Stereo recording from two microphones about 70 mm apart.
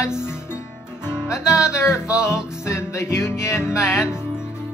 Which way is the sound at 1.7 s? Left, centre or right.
Left.